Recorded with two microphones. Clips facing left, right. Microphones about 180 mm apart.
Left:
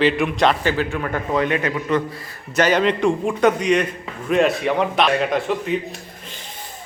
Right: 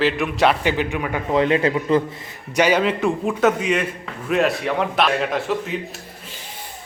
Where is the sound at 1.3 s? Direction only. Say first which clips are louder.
Right 4 dB; 25° right (ahead or behind); by 6.3 s centre (ahead or behind).